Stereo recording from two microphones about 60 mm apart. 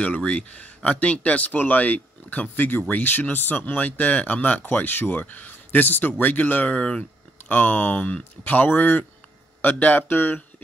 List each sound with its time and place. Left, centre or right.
0.0 s speech: centre